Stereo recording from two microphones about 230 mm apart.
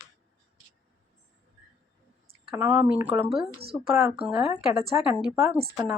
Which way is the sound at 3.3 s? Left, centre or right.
Right.